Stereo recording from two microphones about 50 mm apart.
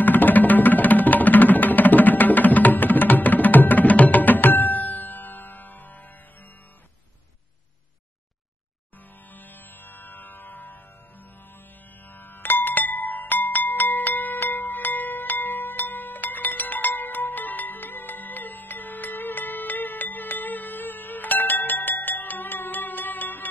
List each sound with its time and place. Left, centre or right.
0.0 s music: left
9.3 s music: left
12.1 s wind chime: left